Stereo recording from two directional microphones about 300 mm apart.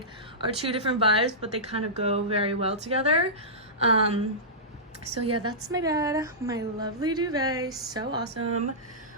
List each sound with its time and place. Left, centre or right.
0.4 s speech: centre
5.1 s speech: right
5.4 s a woman's voice: centre
8.2 s speech: right